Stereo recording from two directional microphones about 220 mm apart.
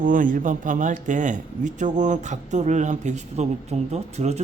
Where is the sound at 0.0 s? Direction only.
35° right (ahead or behind).